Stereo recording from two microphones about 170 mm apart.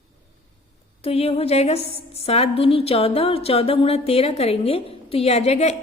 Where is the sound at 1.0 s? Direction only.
35° left (ahead or behind).